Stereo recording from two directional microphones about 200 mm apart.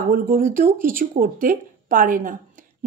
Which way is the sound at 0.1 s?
45° right (ahead or behind).